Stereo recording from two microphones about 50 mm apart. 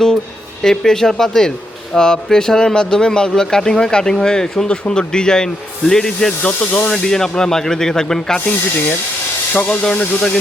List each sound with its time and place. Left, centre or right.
0.6 s speech: centre
6.4 s speech: left
6.9 s speech: centre
9.5 s speech: left